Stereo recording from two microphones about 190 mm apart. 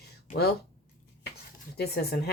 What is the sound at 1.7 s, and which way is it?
Speech, 55° left (ahead or behind).